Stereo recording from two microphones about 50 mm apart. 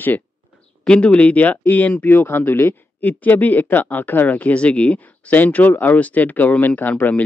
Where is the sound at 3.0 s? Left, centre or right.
Left.